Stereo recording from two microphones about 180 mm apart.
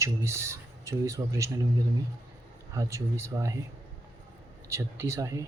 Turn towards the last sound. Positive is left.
turn(degrees=-15)  # may be behind; listen again after turning